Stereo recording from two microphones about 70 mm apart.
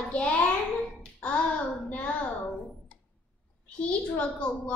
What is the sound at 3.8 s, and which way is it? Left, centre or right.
Speech, centre.